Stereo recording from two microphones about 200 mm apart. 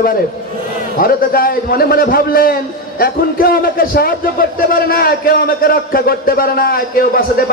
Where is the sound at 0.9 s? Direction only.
45° left (ahead or behind).